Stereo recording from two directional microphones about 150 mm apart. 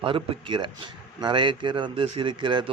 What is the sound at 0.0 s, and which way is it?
A man's voice, 35° right (ahead or behind).